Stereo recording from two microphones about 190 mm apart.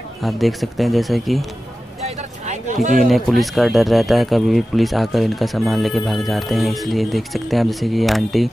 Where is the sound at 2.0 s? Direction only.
35° right (ahead or behind).